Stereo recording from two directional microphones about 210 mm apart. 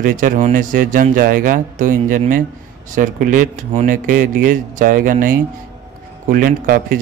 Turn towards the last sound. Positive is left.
turn(degrees=-40)  # may be behind; listen again after turning